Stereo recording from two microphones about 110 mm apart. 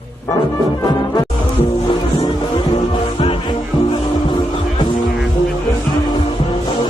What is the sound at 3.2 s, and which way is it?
Music, 55° left (ahead or behind).